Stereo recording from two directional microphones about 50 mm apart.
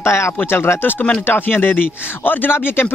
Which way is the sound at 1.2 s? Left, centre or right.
Left.